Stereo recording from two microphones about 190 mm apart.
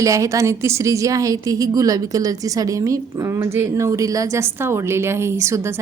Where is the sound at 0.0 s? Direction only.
15° right (ahead or behind).